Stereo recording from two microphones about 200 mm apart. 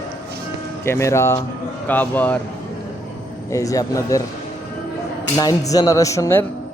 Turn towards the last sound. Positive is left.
turn(degrees=15)  # may be behind; listen again after turning